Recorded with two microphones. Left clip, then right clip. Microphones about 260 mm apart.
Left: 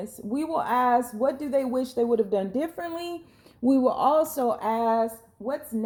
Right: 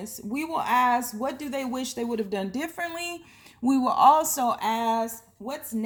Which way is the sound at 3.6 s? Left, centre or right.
Right.